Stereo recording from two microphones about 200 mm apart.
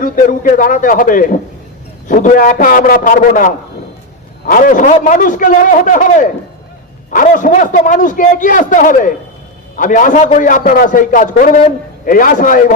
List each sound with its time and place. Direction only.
0.0 s a man's voice: 40° left (ahead or behind)